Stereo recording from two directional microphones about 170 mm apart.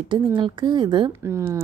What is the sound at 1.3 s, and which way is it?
Speech, 15° right (ahead or behind).